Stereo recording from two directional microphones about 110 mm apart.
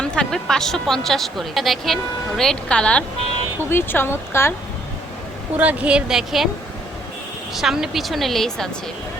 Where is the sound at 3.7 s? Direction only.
20° left (ahead or behind).